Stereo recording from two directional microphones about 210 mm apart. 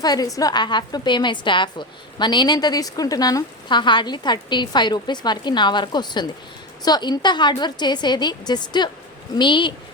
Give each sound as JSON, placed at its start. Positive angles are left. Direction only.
{"t": 0.0, "sound": "a woman's voice", "side_deg": 20}